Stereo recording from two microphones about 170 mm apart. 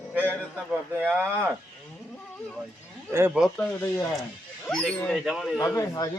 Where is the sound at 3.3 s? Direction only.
Centre (ahead or behind).